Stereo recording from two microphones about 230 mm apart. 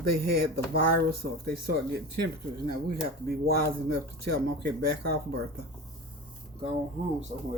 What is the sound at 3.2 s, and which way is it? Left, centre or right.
Speech, right.